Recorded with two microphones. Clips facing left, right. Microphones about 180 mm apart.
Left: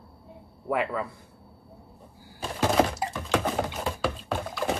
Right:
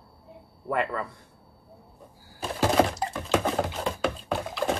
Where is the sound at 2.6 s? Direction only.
5° left (ahead or behind).